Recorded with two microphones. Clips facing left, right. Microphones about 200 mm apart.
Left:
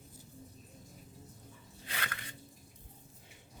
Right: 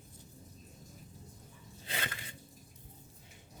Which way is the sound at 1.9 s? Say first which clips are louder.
Right 2 dB; 25° right (ahead or behind).